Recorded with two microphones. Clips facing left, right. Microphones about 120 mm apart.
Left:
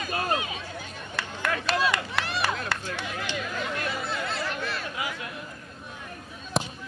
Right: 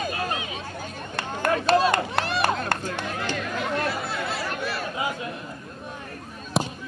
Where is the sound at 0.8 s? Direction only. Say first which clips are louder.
Right 3 dB; 45° right (ahead or behind).